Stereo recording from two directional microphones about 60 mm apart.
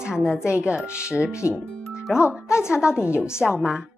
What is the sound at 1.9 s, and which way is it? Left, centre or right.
Music, centre.